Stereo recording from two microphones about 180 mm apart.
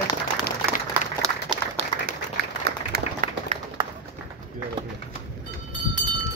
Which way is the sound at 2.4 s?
70° right (ahead or behind).